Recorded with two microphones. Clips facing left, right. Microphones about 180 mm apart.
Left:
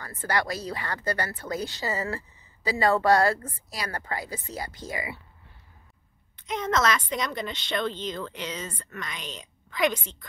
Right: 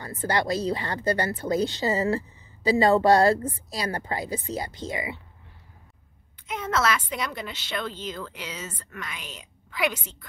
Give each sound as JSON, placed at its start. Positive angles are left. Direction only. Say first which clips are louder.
{"t": 0.0, "sound": "speech", "louder": "right 2 dB", "side_deg": -20}
{"t": 6.3, "sound": "a woman's voice", "louder": "left 1 dB", "side_deg": -10}